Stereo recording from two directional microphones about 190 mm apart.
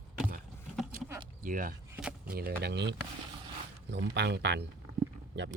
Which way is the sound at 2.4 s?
55° right (ahead or behind).